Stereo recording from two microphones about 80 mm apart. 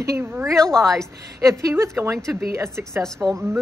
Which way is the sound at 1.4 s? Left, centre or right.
Right.